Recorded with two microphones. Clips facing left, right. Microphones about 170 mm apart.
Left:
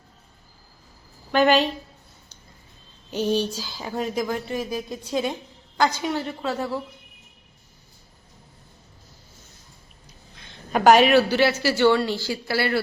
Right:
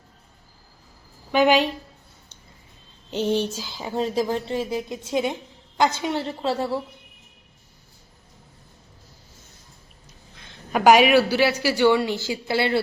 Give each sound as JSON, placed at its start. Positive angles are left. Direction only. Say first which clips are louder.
{"t": 1.3, "sound": "a woman's voice", "louder": "even", "side_deg": -10}
{"t": 3.1, "sound": "speech", "louder": "even", "side_deg": -25}
{"t": 10.7, "sound": "a woman's voice", "louder": "even", "side_deg": -10}